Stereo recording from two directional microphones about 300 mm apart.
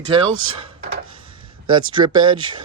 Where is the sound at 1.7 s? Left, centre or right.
Centre.